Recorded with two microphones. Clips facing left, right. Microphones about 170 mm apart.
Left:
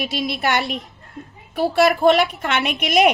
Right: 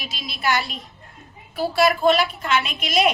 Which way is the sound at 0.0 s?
60° left (ahead or behind).